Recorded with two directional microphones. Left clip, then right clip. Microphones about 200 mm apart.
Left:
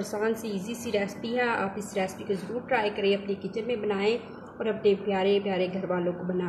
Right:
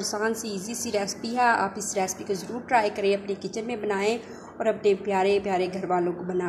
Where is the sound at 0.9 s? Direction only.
20° right (ahead or behind).